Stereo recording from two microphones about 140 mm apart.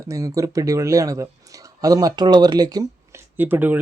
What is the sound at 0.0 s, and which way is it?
Speech, 20° right (ahead or behind).